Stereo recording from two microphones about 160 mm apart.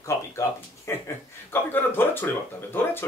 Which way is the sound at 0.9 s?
15° left (ahead or behind).